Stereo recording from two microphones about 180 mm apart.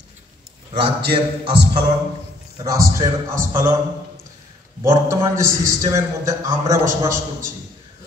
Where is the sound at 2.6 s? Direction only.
20° right (ahead or behind).